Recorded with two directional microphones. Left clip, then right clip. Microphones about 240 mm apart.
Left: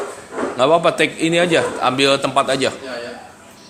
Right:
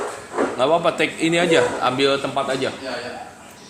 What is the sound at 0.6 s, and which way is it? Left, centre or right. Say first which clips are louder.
A man's voice: left 5 dB; left.